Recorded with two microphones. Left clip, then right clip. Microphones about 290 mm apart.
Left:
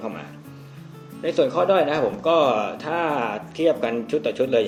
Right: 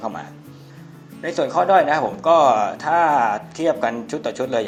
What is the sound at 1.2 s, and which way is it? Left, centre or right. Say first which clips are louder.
Speech: right 1 dB; centre.